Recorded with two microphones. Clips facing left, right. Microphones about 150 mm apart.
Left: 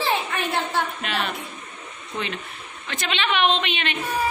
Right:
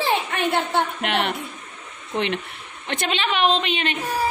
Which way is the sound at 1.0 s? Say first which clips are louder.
Right 4 dB; 70° right (ahead or behind).